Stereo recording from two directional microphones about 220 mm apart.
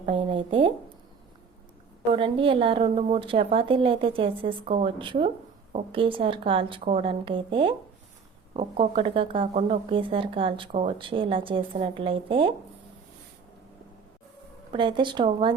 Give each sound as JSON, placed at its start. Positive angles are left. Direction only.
{"t": 0.0, "sound": "speech", "side_deg": -20}
{"t": 2.1, "sound": "speech", "side_deg": -25}
{"t": 8.8, "sound": "speech", "side_deg": -25}
{"t": 14.7, "sound": "speech", "side_deg": -20}